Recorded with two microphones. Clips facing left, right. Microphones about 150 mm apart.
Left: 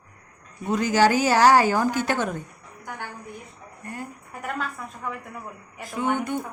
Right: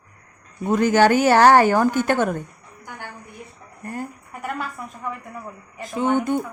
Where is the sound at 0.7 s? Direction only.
55° right (ahead or behind).